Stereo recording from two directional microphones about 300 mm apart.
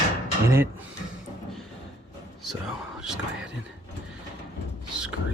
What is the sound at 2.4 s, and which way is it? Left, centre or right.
Whispering, centre.